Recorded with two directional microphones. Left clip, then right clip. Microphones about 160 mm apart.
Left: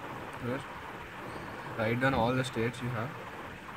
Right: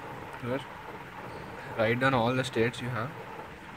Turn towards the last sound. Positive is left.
turn(degrees=-40)  # may be behind; listen again after turning